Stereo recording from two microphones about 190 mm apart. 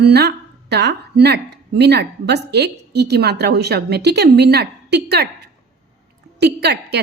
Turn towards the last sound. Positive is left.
turn(degrees=-60)  # may be behind; listen again after turning